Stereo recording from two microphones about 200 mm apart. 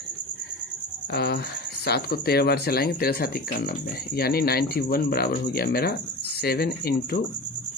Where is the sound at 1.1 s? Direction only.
50° left (ahead or behind).